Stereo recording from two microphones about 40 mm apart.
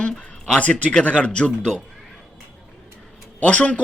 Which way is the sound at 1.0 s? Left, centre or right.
Left.